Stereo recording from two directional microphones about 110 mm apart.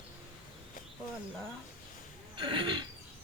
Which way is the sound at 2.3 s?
50° right (ahead or behind).